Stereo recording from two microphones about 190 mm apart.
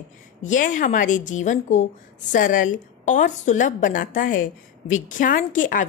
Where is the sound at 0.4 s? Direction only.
40° left (ahead or behind).